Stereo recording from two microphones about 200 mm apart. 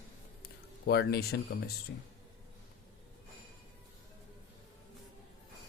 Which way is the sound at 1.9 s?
65° left (ahead or behind).